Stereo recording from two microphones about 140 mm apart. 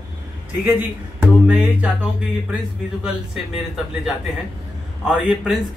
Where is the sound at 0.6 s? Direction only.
15° right (ahead or behind).